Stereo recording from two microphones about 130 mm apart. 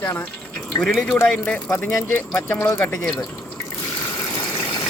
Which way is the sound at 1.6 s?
20° left (ahead or behind).